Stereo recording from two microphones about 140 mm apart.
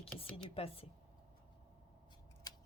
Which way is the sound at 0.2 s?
40° left (ahead or behind).